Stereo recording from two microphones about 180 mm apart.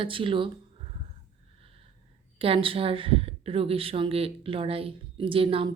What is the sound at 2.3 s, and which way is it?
A woman's voice, 30° right (ahead or behind).